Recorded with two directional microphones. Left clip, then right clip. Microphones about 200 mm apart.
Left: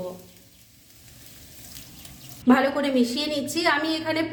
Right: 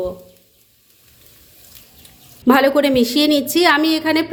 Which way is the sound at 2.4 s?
50° right (ahead or behind).